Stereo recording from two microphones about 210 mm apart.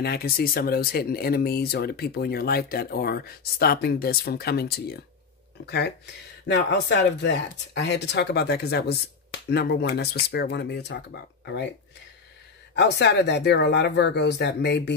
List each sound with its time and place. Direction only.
0.0 s speech: 45° left (ahead or behind)
12.7 s speech: 55° left (ahead or behind)